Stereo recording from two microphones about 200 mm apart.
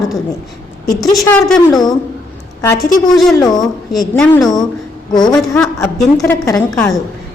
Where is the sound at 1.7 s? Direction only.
20° left (ahead or behind).